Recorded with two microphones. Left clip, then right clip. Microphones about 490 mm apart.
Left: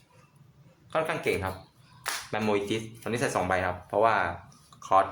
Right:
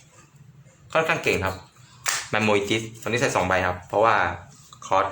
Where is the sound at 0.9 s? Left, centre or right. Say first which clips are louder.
Right 6 dB; left.